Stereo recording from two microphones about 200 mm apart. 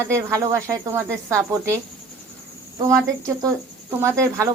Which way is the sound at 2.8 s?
15° right (ahead or behind).